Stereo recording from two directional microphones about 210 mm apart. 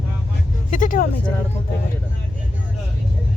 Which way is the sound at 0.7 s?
40° left (ahead or behind).